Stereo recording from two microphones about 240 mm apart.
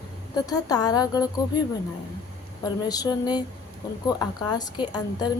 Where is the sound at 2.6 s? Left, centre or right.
Centre.